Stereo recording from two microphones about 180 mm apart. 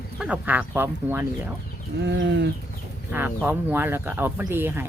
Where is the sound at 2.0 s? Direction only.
75° right (ahead or behind).